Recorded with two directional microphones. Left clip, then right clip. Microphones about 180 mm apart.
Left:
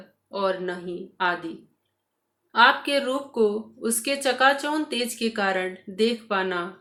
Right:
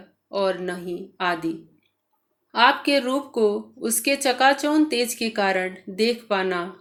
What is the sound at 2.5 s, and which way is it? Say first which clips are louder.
A woman's voice: even; 35° right (ahead or behind).